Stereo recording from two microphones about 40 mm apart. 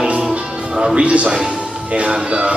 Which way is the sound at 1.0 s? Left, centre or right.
Right.